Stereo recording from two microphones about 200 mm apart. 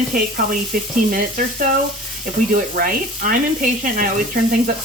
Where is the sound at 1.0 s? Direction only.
45° right (ahead or behind).